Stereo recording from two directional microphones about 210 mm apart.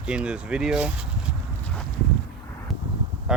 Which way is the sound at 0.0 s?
5° right (ahead or behind).